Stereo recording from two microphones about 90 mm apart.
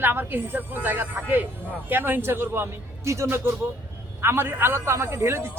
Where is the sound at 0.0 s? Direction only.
20° right (ahead or behind).